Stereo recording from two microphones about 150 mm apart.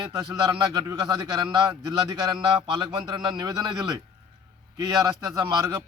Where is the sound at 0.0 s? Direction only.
25° right (ahead or behind).